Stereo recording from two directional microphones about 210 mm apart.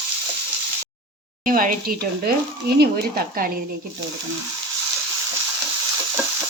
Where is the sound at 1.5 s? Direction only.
40° right (ahead or behind).